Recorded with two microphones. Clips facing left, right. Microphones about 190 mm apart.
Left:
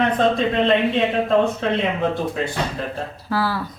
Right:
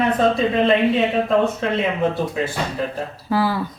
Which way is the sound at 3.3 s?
15° right (ahead or behind).